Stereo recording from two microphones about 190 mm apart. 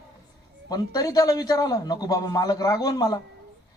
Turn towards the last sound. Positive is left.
turn(degrees=20)  # may be behind; listen again after turning